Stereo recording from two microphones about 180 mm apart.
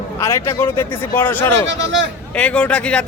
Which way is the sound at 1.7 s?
85° right.